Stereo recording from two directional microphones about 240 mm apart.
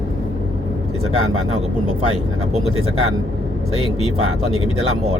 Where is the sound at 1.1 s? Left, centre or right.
Right.